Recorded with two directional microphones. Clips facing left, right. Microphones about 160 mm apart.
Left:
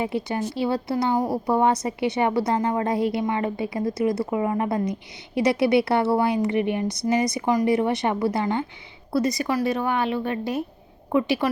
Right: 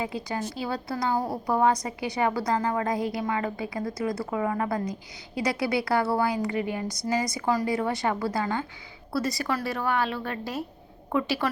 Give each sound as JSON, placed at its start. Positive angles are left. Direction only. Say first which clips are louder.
{"t": 0.0, "sound": "speech", "louder": "left 5 dB", "side_deg": 25}